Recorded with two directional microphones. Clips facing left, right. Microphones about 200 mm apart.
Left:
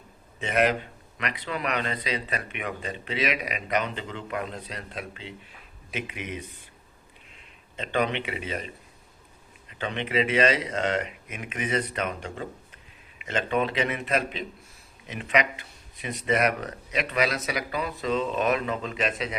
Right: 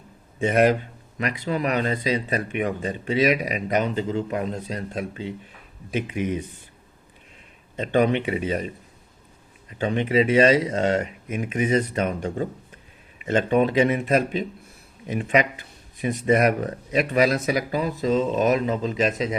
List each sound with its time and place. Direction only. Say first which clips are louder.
0.3 s a man's voice: right 5 dB; 45° right (ahead or behind)
1.4 s speech: right 6 dB; 35° right (ahead or behind)
6.1 s speech: right 10 dB; 30° right (ahead or behind)
7.9 s speech: right 7 dB; 45° right (ahead or behind)
9.8 s speech: right 6 dB; 35° right (ahead or behind)
17.5 s speech: right 6 dB; 35° right (ahead or behind)